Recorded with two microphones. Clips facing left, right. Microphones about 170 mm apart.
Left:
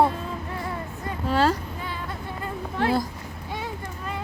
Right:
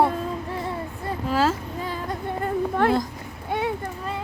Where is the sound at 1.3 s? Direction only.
5° right (ahead or behind).